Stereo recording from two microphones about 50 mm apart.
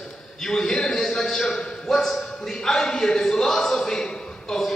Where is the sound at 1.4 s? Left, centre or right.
Centre.